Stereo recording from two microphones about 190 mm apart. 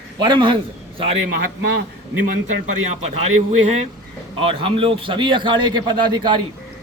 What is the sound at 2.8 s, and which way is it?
Speech, 35° right (ahead or behind).